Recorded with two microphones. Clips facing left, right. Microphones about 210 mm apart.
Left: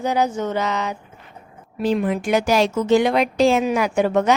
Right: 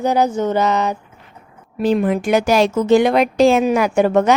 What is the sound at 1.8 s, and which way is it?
Speech, 55° right (ahead or behind).